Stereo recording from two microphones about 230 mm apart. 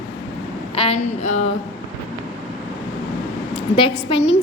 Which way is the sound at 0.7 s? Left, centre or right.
Left.